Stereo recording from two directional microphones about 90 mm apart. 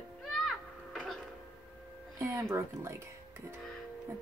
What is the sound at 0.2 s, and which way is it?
Music, centre (ahead or behind).